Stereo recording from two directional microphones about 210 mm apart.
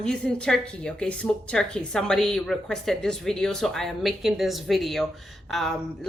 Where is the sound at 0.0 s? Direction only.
5° left (ahead or behind).